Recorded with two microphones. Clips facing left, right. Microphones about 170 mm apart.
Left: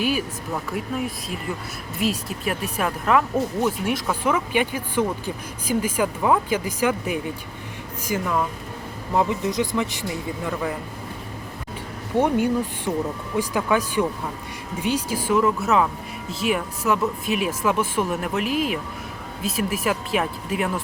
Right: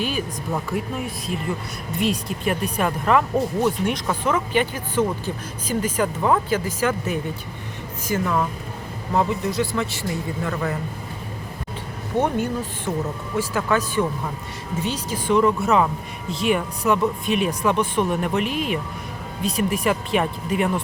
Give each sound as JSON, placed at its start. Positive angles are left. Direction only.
{"t": 0.5, "sound": "speech", "side_deg": 0}
{"t": 12.1, "sound": "speech", "side_deg": 10}